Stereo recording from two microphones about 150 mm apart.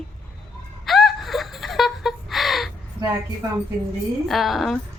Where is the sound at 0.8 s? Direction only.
Centre (ahead or behind).